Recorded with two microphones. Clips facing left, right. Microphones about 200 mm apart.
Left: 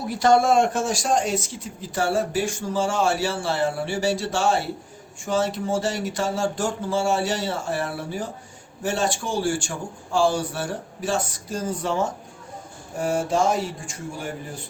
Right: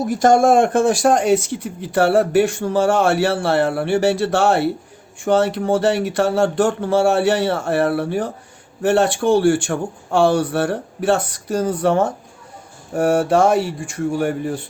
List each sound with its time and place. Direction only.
0.0 s speech: 50° right (ahead or behind); by 14.6 s 65° right (ahead or behind)